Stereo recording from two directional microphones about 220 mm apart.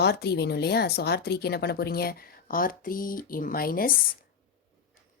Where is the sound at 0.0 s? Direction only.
45° left (ahead or behind).